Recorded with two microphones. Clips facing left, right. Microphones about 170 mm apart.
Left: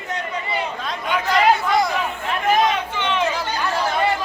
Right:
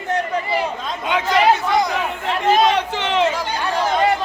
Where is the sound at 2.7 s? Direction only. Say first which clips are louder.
Right 3 dB; 80° right.